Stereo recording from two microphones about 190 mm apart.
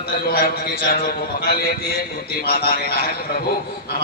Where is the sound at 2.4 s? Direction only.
55° left (ahead or behind).